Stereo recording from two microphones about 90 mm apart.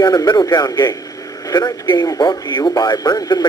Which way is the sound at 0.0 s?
45° left (ahead or behind).